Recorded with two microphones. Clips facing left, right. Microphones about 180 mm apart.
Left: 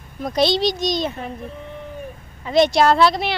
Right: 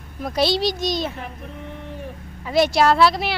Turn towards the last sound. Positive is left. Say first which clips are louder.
# left 1 dB
turn(degrees=-5)  # may be behind; listen again after turning